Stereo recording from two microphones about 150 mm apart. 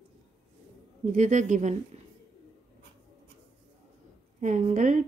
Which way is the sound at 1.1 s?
55° right (ahead or behind).